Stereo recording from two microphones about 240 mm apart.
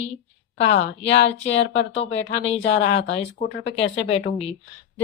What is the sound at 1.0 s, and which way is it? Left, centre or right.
Speech, left.